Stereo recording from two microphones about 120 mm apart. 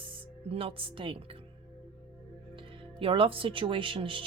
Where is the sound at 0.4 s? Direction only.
55° right (ahead or behind).